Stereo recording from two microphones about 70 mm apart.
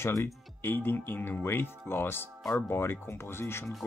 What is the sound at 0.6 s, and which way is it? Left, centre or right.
Speech, left.